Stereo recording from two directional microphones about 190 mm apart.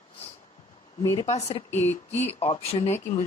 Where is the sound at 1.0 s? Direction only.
20° left (ahead or behind).